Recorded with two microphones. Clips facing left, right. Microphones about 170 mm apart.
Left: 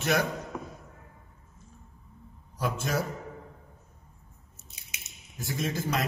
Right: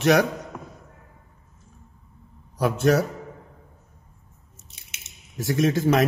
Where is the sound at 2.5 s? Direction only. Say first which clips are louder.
Right 10 dB; 75° right (ahead or behind).